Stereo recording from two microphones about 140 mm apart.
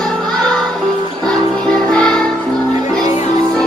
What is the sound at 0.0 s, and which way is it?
Music, 5° left (ahead or behind).